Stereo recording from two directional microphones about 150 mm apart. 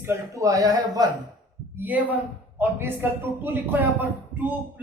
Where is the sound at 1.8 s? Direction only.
10° right (ahead or behind).